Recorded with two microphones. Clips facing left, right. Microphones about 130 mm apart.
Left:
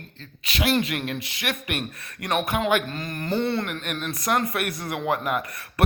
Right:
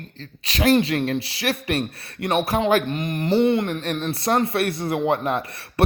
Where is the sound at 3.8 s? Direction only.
30° right (ahead or behind).